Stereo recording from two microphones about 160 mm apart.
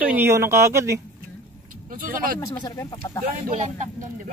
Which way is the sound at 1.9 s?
60° right (ahead or behind).